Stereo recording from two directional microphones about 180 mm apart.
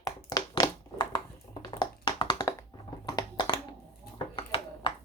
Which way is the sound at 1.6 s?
25° left (ahead or behind).